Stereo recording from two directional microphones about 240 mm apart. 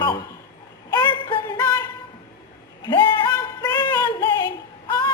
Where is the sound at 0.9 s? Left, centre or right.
Centre.